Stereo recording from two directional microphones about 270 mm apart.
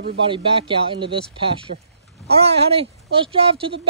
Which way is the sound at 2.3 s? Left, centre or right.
Right.